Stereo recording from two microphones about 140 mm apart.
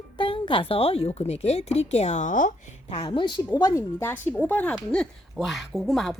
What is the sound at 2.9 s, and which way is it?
A woman's voice, 35° left (ahead or behind).